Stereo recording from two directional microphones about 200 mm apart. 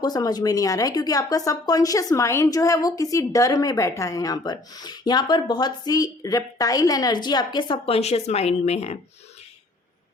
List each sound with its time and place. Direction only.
0.0 s speech: 20° left (ahead or behind)